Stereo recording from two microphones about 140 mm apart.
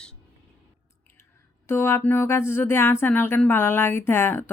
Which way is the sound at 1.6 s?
20° left (ahead or behind).